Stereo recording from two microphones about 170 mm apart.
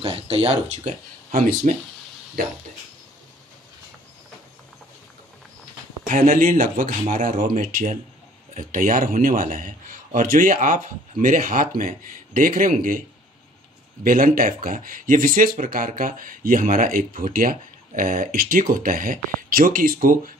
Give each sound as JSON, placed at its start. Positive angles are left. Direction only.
{"t": 0.0, "sound": "speech", "side_deg": -35}
{"t": 1.6, "sound": "speech", "side_deg": -50}
{"t": 6.0, "sound": "speech", "side_deg": -50}
{"t": 14.0, "sound": "speech", "side_deg": -55}